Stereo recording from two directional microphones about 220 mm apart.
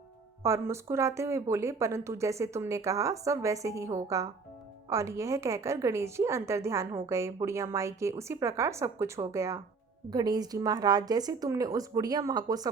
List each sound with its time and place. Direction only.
0.4 s a woman's voice: 10° right (ahead or behind)